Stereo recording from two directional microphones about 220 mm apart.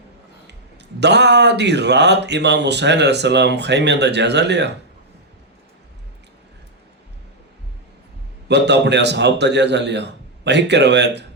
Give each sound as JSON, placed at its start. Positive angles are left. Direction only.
{"t": 0.9, "sound": "speech", "side_deg": -50}
{"t": 8.4, "sound": "speech", "side_deg": -50}